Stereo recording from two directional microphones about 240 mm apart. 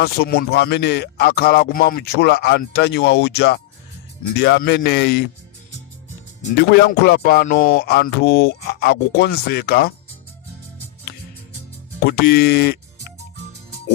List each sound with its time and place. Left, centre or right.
0.0 s speech: left
7.0 s speech: left
12.0 s speech: left